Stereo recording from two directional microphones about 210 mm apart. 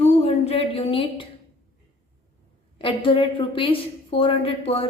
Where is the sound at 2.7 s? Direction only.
25° left (ahead or behind).